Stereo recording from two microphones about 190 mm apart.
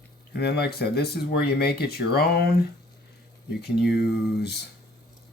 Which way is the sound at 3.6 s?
60° left (ahead or behind).